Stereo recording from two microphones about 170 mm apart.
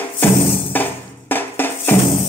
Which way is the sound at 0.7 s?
10° left (ahead or behind).